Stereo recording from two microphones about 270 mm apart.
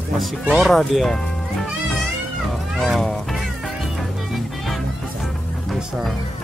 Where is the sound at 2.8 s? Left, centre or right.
Centre.